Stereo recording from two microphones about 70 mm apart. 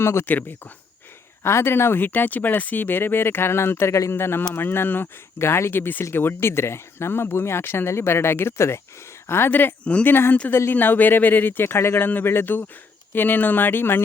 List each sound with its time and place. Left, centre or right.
0.0 s speech: left
1.5 s speech: left
9.8 s speech: centre
10.1 s speech: left